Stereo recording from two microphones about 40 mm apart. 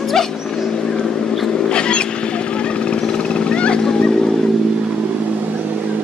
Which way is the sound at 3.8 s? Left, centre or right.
Centre.